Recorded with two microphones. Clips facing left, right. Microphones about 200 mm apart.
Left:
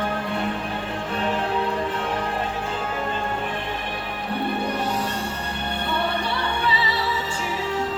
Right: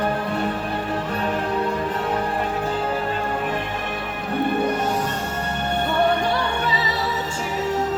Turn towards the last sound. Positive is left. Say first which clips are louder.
# right 3 dB
turn(degrees=-45)  # may be behind; listen again after turning